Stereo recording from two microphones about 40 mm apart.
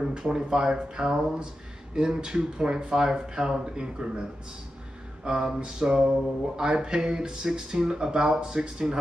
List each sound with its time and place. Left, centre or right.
0.0 s speech: centre
5.2 s speech: centre